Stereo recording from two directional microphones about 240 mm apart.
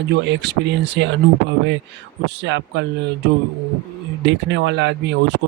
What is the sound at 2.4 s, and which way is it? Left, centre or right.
Speech, right.